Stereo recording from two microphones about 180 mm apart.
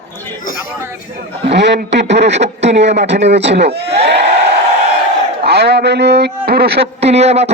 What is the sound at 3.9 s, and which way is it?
Crowd, 35° right (ahead or behind).